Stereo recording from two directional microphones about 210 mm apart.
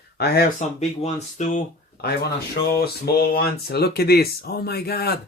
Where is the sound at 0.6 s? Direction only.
35° left (ahead or behind).